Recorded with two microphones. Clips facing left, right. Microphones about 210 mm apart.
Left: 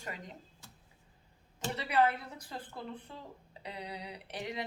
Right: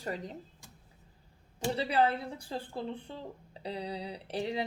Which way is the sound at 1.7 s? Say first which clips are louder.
Right 1 dB; 30° right (ahead or behind).